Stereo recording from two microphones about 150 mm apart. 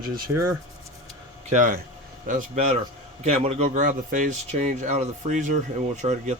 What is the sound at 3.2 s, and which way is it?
Speech, 45° right (ahead or behind).